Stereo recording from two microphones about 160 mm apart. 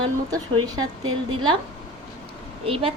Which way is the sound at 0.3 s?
25° right (ahead or behind).